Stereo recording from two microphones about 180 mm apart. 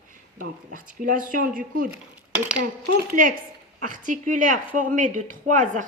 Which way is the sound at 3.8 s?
45° right (ahead or behind).